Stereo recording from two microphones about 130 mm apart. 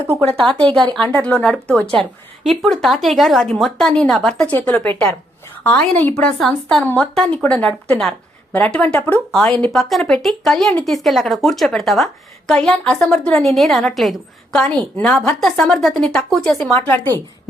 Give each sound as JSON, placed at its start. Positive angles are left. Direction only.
{"t": 0.7, "sound": "speech", "side_deg": -35}
{"t": 1.1, "sound": "a woman's voice", "side_deg": 10}
{"t": 6.4, "sound": "a woman's voice", "side_deg": 0}
{"t": 16.7, "sound": "a woman's voice", "side_deg": 15}